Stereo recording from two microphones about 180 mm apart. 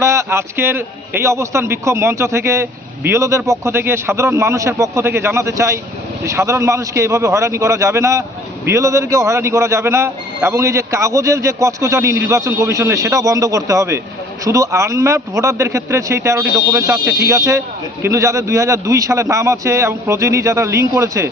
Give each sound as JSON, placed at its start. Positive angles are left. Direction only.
{"t": 0.0, "sound": "a man's voice", "side_deg": -15}